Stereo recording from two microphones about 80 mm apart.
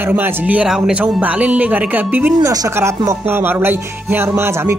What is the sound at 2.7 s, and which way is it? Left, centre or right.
Speech, right.